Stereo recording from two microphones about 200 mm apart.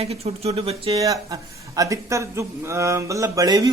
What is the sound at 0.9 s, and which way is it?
A man's voice, 15° right (ahead or behind).